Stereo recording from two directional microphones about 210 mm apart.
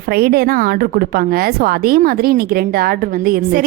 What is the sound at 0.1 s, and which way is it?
A woman's voice, 45° right (ahead or behind).